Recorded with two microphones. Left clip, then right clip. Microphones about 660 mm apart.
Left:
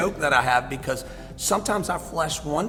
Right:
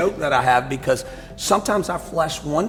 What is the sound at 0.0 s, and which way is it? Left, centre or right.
Speech, right.